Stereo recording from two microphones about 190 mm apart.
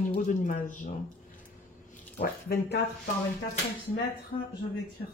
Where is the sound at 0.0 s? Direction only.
45° left (ahead or behind).